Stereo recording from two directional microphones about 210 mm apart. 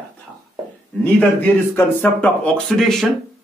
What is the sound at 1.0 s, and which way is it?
Speech, 10° left (ahead or behind).